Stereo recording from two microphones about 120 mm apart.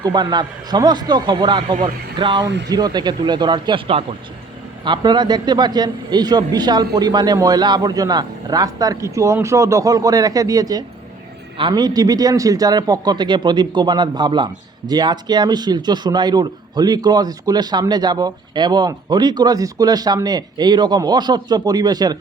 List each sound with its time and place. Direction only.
0.0 s a man's voice: 35° right (ahead or behind)